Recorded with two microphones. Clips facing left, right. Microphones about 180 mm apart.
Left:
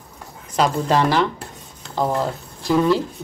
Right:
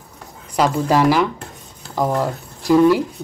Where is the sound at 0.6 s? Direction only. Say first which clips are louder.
Right 2 dB; 10° right (ahead or behind).